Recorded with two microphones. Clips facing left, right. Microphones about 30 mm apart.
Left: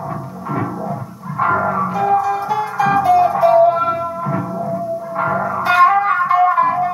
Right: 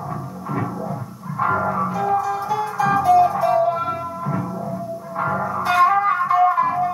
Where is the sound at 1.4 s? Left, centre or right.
Centre.